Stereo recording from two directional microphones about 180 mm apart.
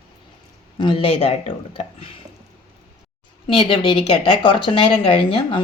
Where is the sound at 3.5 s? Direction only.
30° left (ahead or behind).